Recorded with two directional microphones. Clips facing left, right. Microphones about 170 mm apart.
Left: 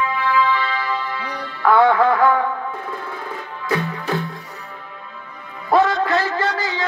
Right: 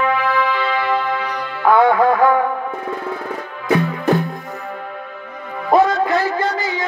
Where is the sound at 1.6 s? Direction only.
20° right (ahead or behind).